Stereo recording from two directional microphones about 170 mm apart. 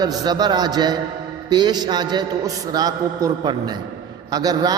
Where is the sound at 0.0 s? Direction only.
25° right (ahead or behind).